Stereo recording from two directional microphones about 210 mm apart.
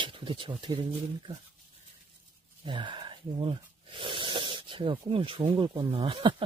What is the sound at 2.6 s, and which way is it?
Speech, 25° right (ahead or behind).